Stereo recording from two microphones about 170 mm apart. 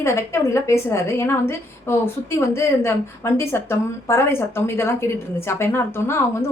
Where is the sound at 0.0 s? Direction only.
15° left (ahead or behind).